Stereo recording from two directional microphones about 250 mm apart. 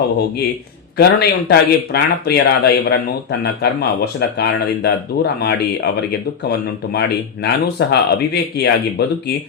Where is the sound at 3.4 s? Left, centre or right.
Left.